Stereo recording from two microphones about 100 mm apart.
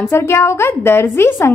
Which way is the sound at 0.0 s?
25° left (ahead or behind).